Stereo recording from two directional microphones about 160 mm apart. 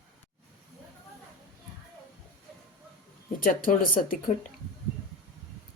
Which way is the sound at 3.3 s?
60° left (ahead or behind).